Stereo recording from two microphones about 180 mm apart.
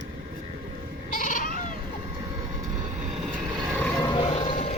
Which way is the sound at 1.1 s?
45° left (ahead or behind).